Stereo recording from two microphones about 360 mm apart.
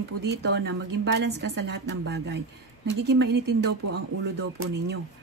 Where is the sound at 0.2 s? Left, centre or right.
Right.